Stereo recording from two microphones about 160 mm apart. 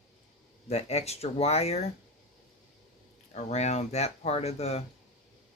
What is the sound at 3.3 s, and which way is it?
Speech, 45° left (ahead or behind).